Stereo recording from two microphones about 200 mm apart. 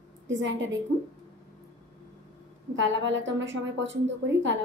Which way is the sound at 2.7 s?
65° right (ahead or behind).